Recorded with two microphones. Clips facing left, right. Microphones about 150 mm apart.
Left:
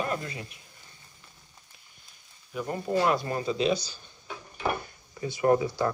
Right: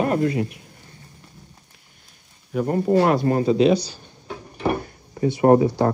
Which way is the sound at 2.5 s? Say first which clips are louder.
Right 10 dB; 45° right (ahead or behind).